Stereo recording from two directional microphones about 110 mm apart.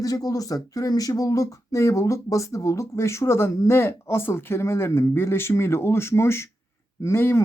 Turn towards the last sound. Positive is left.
turn(degrees=20)  # may be behind; listen again after turning